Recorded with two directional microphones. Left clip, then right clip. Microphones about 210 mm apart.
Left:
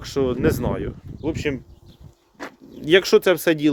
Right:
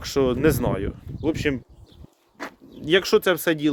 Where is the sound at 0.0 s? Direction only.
30° right (ahead or behind).